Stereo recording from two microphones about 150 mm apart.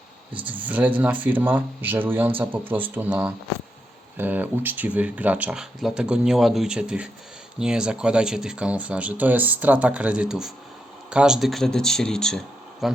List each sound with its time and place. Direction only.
0.3 s speech: 10° right (ahead or behind)